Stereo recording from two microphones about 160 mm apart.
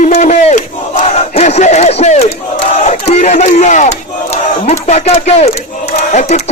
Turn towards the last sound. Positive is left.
turn(degrees=50)  # may be behind; listen again after turning